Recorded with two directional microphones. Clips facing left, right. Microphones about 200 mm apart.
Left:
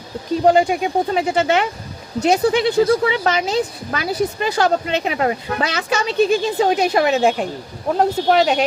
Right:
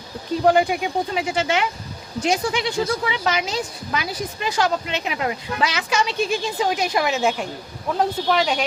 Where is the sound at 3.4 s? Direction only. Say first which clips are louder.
Left 7 dB; 50° left (ahead or behind).